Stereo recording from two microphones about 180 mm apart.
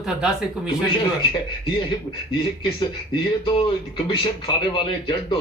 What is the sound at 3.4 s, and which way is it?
Speech, 25° left (ahead or behind).